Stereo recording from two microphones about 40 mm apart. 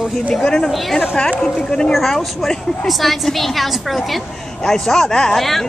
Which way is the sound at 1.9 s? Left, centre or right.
Centre.